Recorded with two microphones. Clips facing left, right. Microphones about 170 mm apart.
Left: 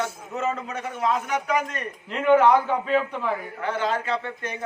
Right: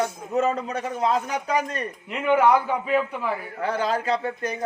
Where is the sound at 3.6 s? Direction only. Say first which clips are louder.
Right 2 dB; 35° right (ahead or behind).